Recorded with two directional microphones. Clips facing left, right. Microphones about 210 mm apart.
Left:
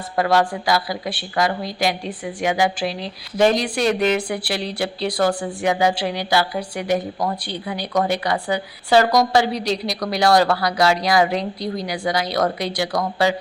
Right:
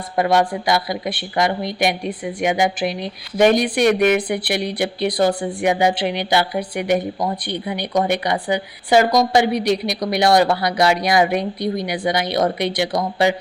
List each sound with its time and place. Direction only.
0.2 s speech: 20° right (ahead or behind)
6.0 s a woman's voice: 20° right (ahead or behind)